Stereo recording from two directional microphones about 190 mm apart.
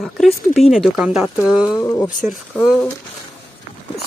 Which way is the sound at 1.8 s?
15° left (ahead or behind).